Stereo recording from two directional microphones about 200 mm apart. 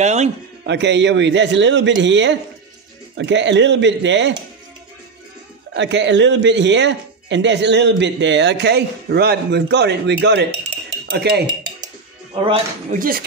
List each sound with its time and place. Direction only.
0.0 s a man's voice: 35° right (ahead or behind)
0.7 s a man's voice: 60° right (ahead or behind)
5.8 s a man's voice: 65° right (ahead or behind)
11.4 s dishes: 20° right (ahead or behind)
12.9 s speech: 45° right (ahead or behind)